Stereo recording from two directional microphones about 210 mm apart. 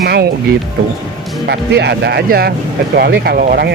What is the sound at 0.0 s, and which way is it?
Speech, 50° right (ahead or behind).